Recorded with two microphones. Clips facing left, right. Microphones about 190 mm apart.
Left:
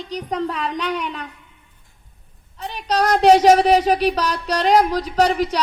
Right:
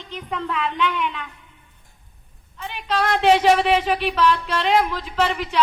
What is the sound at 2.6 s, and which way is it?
A woman's voice, 40° left (ahead or behind).